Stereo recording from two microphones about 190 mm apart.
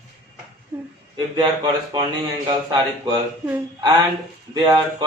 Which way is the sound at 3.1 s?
20° right (ahead or behind).